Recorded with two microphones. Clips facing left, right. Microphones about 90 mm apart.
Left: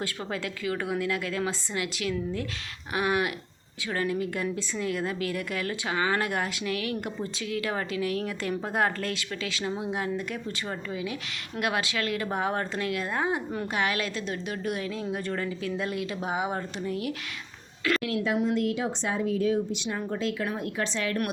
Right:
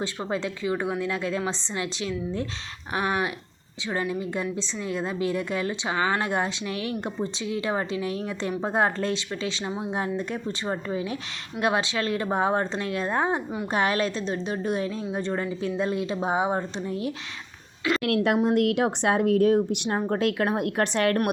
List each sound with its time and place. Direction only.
0.0 s a woman's voice: 25° right (ahead or behind)
18.0 s speech: 65° right (ahead or behind)